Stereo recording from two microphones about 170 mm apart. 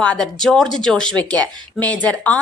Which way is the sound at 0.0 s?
5° left (ahead or behind).